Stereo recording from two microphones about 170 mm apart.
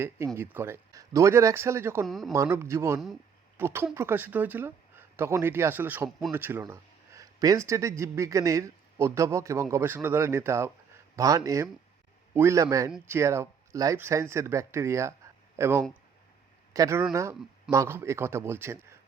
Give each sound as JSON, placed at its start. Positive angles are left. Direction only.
{"t": 0.3, "sound": "speech", "side_deg": -15}
{"t": 2.0, "sound": "speech", "side_deg": 0}
{"t": 2.3, "sound": "speech", "side_deg": -15}